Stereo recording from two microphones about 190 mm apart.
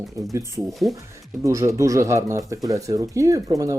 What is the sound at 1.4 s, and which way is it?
Speech, 15° right (ahead or behind).